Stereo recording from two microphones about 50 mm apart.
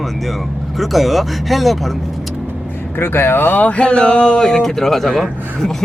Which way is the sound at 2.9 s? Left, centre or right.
Left.